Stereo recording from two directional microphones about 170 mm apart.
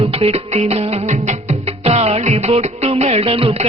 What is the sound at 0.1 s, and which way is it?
Music, 35° right (ahead or behind).